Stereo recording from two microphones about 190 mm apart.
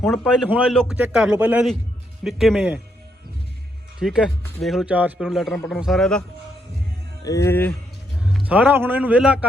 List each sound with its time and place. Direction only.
0.3 s a man's voice: 5° right (ahead or behind)
4.0 s a man's voice: 5° right (ahead or behind)
7.3 s speech: 15° left (ahead or behind)
8.2 s a man's voice: 5° right (ahead or behind)